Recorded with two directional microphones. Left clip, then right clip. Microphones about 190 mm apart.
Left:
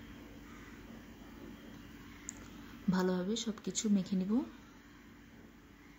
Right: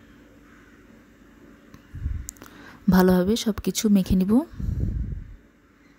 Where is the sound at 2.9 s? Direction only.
40° right (ahead or behind).